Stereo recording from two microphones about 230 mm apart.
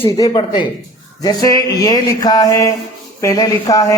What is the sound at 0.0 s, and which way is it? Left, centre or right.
Speech, centre.